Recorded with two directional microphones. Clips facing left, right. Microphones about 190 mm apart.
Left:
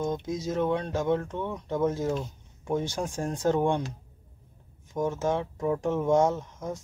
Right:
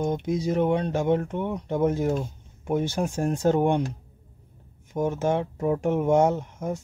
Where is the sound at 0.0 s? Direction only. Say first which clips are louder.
Right 4 dB; 20° right (ahead or behind).